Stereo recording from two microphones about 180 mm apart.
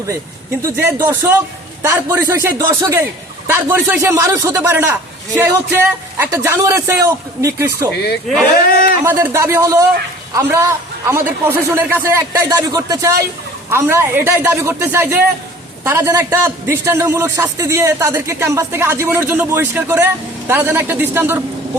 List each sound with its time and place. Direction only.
0.6 s a man's voice: 15° right (ahead or behind)
7.9 s speech: 65° left (ahead or behind)
8.6 s a sound: 55° left (ahead or behind)
9.0 s a man's voice: 15° right (ahead or behind)